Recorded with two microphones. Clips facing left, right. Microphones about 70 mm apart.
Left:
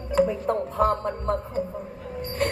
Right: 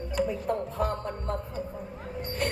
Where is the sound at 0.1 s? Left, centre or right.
Left.